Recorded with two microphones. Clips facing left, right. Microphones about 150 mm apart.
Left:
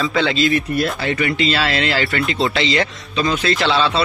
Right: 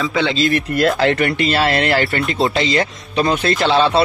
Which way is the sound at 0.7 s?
90° right.